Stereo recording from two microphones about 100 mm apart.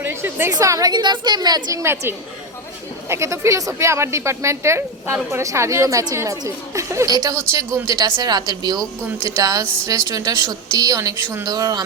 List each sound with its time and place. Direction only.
0.0 s a woman's voice: 20° right (ahead or behind)
0.5 s a woman's voice: 35° right (ahead or behind)
1.8 s a woman's voice: 25° right (ahead or behind)